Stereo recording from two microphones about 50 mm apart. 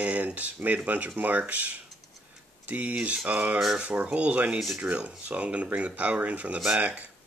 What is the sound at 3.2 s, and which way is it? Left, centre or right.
Speech, right.